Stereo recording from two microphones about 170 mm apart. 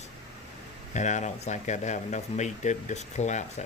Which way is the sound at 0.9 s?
45° left (ahead or behind).